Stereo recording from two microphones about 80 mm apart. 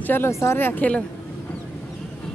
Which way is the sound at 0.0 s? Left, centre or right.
Left.